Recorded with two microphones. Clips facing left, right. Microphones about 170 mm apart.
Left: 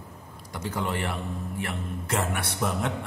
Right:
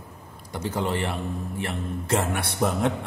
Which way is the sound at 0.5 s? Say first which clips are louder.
Right 3 dB; 30° right (ahead or behind).